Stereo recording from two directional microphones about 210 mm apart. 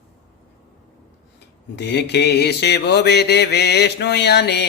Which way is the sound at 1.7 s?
55° left (ahead or behind).